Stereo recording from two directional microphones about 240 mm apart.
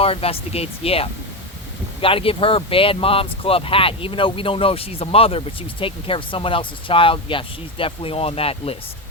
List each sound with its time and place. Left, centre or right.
0.0 s speech: left